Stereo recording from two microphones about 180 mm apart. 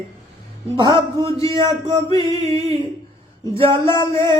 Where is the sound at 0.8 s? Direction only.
30° right (ahead or behind).